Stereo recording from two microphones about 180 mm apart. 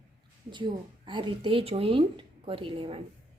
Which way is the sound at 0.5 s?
25° right (ahead or behind).